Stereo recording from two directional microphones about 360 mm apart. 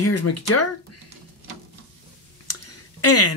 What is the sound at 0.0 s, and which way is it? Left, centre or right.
Speech, left.